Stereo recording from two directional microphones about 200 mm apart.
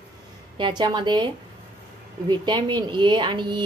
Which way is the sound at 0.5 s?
25° right (ahead or behind).